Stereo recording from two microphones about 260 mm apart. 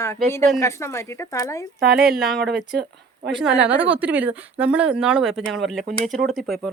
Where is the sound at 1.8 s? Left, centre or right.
Right.